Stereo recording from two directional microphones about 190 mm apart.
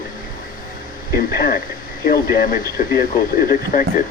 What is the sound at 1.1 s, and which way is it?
Speech, 50° left (ahead or behind).